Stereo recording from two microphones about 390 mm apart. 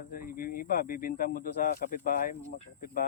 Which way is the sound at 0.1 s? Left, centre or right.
Left.